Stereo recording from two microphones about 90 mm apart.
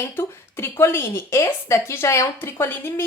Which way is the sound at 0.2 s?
25° left (ahead or behind).